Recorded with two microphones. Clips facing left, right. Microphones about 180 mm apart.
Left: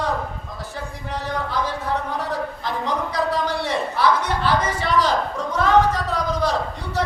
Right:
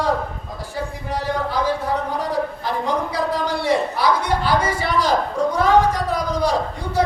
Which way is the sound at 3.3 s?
10° right (ahead or behind).